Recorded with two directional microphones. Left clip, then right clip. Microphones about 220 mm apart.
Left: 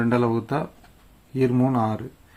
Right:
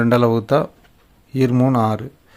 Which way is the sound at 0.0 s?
45° right (ahead or behind).